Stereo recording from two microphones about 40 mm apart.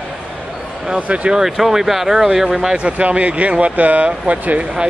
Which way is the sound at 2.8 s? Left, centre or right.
Right.